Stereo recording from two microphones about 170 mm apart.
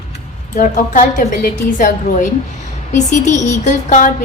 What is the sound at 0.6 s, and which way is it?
A woman's voice, 50° left (ahead or behind).